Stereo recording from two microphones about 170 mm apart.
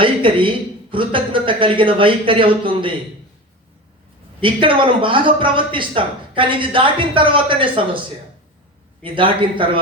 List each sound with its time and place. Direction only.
0.0 s speech: 30° right (ahead or behind)
4.4 s speech: 30° right (ahead or behind)
9.0 s a man's voice: 30° right (ahead or behind)